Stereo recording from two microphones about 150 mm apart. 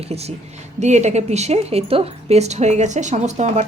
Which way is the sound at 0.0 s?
45° right (ahead or behind).